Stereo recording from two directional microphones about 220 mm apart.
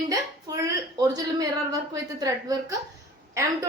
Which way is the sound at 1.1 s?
15° right (ahead or behind).